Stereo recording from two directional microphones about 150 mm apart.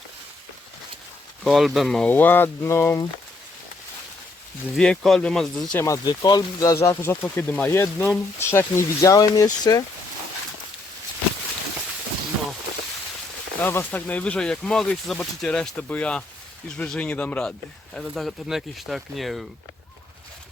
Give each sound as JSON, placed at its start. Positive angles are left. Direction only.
{"t": 1.5, "sound": "speech", "side_deg": 0}
{"t": 4.7, "sound": "speech", "side_deg": 5}
{"t": 5.8, "sound": "speech", "side_deg": 25}
{"t": 13.6, "sound": "speech", "side_deg": 15}